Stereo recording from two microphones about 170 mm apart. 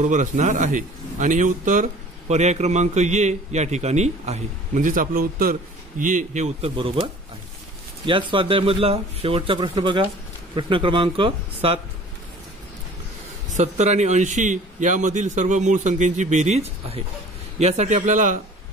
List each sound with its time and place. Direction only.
0.0 s a man's voice: 45° right (ahead or behind)
8.0 s speech: 30° right (ahead or behind)
13.5 s a man's voice: 45° right (ahead or behind)